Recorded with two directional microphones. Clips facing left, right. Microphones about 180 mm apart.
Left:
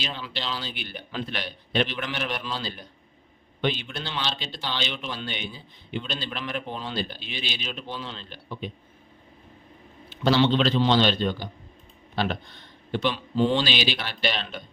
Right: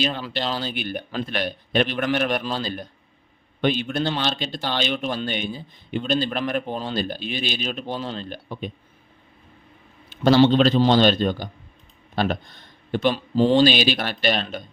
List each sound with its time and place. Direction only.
0.0 s speech: 50° right (ahead or behind)
10.1 s speech: 45° right (ahead or behind)